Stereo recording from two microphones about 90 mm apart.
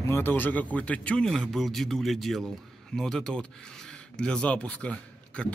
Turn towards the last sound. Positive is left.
turn(degrees=15)  # may be behind; listen again after turning